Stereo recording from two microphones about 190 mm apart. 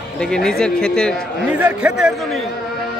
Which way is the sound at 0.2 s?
5° left (ahead or behind).